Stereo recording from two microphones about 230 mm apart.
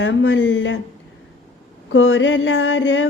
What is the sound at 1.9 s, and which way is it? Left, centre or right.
Mantra, left.